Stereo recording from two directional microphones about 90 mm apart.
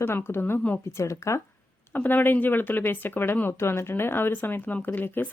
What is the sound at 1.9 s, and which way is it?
A woman's voice, 20° left (ahead or behind).